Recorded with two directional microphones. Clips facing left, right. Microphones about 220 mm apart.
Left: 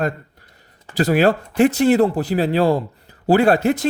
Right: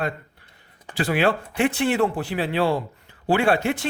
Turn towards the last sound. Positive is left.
turn(degrees=40)  # may be behind; listen again after turning